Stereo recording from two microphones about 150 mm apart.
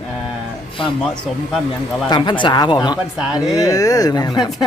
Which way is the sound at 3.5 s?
20° left (ahead or behind).